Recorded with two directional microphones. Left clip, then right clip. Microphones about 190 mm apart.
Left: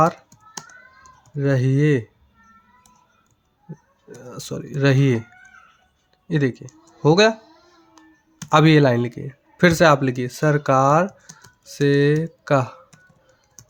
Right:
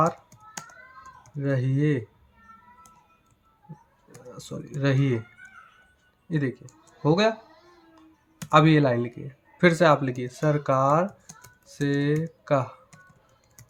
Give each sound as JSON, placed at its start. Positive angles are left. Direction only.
{"t": 1.4, "sound": "speech", "side_deg": 50}
{"t": 4.3, "sound": "speech", "side_deg": 50}
{"t": 6.2, "sound": "speech", "side_deg": 50}
{"t": 8.0, "sound": "music", "side_deg": 50}
{"t": 8.4, "sound": "speech", "side_deg": 50}